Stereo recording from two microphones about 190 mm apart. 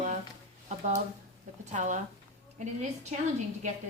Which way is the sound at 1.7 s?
40° right (ahead or behind).